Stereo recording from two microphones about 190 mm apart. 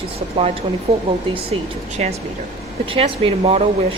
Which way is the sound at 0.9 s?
35° right (ahead or behind).